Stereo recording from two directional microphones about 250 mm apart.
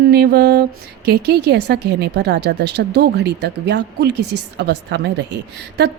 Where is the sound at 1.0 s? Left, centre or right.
Right.